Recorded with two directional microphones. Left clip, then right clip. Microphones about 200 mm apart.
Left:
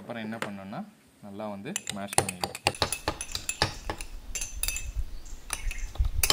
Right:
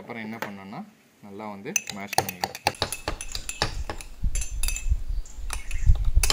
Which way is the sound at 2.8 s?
10° right (ahead or behind).